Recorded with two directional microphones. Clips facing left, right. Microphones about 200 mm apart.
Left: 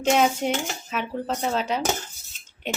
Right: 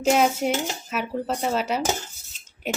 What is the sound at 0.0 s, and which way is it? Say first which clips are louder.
Cutlery: right 1 dB; 5° right (ahead or behind).